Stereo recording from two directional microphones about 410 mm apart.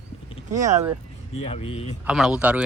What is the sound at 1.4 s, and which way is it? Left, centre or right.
Speech, centre.